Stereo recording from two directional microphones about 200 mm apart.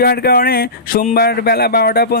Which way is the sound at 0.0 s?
50° left (ahead or behind).